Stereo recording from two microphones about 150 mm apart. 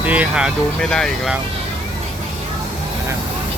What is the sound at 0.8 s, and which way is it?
Speech, 5° left (ahead or behind).